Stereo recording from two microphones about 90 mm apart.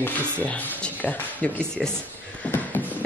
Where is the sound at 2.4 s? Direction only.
20° left (ahead or behind).